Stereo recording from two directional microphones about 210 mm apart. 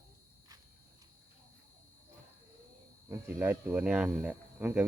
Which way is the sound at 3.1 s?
10° right (ahead or behind).